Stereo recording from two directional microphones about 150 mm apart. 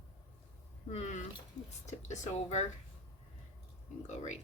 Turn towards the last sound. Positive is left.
turn(degrees=50)  # may be behind; listen again after turning